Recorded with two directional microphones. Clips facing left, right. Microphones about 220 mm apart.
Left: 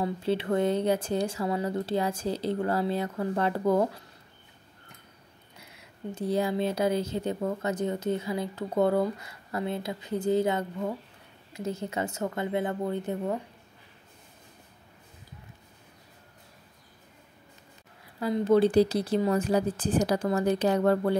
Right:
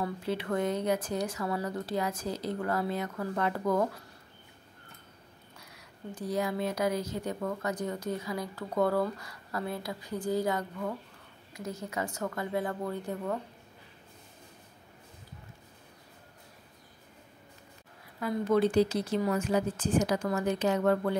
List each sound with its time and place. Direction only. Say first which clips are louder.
0.0 s speech: left 5 dB; 30° left (ahead or behind)
5.6 s speech: left 6 dB; 25° left (ahead or behind)
18.2 s a woman's voice: left 4 dB; 30° left (ahead or behind)